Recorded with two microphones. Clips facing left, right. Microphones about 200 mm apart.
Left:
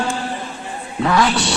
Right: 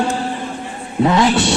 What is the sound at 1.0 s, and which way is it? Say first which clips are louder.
Speech: right 3 dB; 25° right (ahead or behind).